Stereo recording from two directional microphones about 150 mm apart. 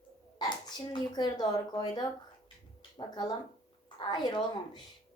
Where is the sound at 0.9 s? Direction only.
30° left (ahead or behind).